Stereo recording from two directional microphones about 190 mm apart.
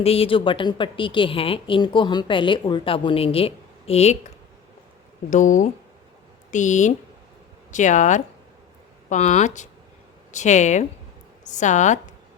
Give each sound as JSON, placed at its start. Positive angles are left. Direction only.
{"t": 0.0, "sound": "a woman's voice", "side_deg": 30}
{"t": 5.3, "sound": "speech", "side_deg": 40}